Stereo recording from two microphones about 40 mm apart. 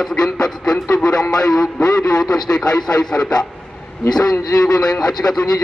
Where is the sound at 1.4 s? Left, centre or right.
Centre.